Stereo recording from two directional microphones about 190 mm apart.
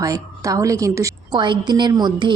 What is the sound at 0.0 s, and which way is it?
A woman's voice, 15° right (ahead or behind).